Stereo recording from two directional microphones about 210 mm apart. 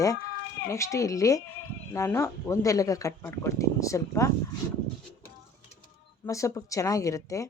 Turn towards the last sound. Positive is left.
turn(degrees=15)  # may be behind; listen again after turning